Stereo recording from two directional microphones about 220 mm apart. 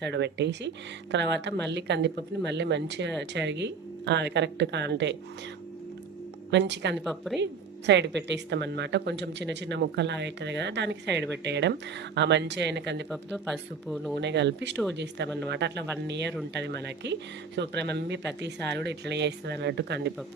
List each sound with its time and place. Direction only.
0.0 s a woman's voice: 50° right (ahead or behind)
6.5 s a woman's voice: 50° right (ahead or behind)
7.0 s speech: centre (ahead or behind)
7.3 s a woman's voice: 50° right (ahead or behind)
13.1 s speech: centre (ahead or behind)
14.2 s a woman's voice: 50° right (ahead or behind)